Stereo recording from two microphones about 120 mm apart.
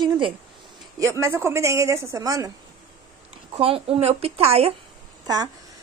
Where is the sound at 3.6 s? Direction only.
50° right (ahead or behind).